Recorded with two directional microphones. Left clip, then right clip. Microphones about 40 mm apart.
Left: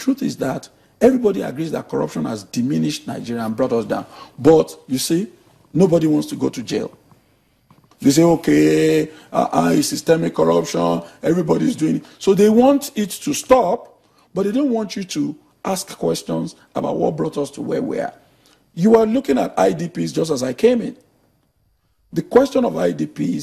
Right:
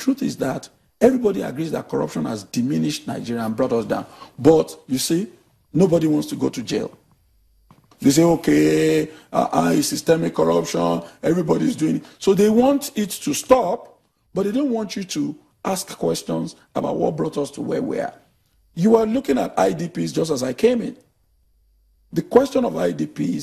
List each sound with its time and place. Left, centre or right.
0.0 s speech: left
8.0 s speech: left
22.1 s speech: left